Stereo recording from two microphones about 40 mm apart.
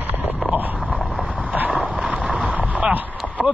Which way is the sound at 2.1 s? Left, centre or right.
Right.